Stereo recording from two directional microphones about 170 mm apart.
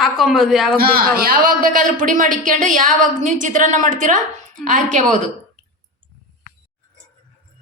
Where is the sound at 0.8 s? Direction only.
60° right (ahead or behind).